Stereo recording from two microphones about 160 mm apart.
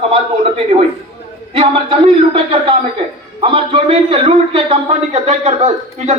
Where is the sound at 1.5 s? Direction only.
35° right (ahead or behind).